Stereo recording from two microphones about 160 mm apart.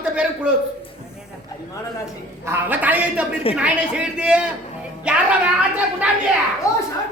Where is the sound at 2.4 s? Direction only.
10° right (ahead or behind).